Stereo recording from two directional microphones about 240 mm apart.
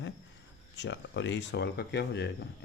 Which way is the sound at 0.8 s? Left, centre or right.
Left.